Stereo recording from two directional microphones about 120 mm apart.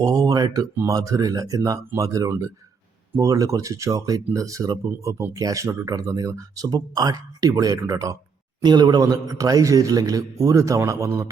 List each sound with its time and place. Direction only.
0.0 s a man's voice: 30° right (ahead or behind)